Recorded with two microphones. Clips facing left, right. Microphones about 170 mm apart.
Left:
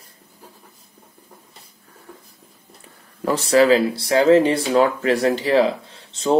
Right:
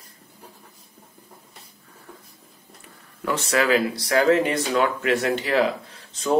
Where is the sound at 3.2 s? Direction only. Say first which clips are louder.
Left 7 dB; 35° left (ahead or behind).